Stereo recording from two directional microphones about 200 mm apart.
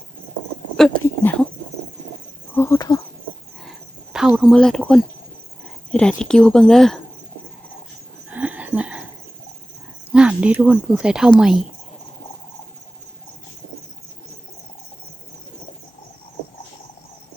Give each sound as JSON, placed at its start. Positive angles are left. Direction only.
{"t": 1.0, "sound": "a sound", "side_deg": 10}
{"t": 2.6, "sound": "insect", "side_deg": 15}
{"t": 3.6, "sound": "cricket", "side_deg": 0}
{"t": 5.9, "sound": "speech", "side_deg": 5}
{"t": 8.3, "sound": "a sound", "side_deg": -5}
{"t": 10.1, "sound": "speech", "side_deg": -5}